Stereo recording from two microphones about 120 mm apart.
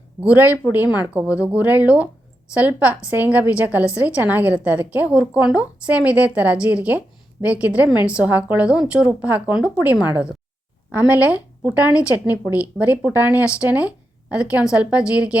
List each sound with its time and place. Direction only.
0.2 s a woman's voice: 15° right (ahead or behind)